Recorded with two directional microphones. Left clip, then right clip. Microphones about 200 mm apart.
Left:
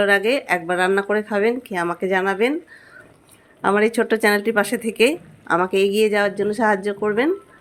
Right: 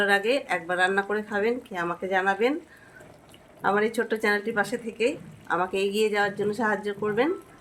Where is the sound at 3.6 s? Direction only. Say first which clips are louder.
Left 6 dB; 40° left (ahead or behind).